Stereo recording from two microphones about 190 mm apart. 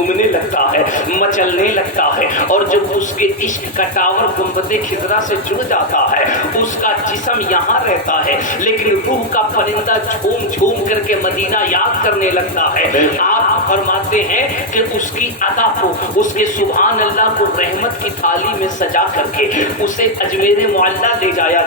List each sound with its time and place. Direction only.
1.1 s speech: 45° left (ahead or behind)
3.8 s speech: 45° left (ahead or behind)
5.7 s speech: 40° left (ahead or behind)
12.2 s speech: 45° left (ahead or behind)
16.4 s speech: 45° left (ahead or behind)
19.5 s speech: 45° left (ahead or behind)